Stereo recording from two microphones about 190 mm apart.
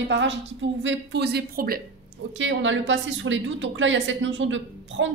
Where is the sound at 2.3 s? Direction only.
80° right.